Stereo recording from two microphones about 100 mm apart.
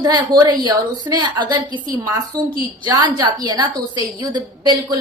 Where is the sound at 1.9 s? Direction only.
35° right (ahead or behind).